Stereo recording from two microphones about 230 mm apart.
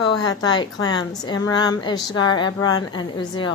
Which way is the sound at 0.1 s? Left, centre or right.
Centre.